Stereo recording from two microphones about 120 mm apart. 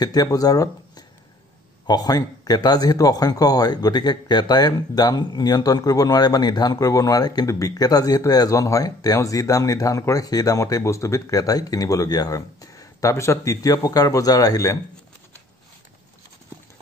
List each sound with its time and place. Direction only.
0.0 s speech: 35° left (ahead or behind)